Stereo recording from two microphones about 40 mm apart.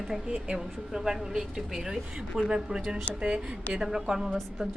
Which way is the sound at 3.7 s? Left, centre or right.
Centre.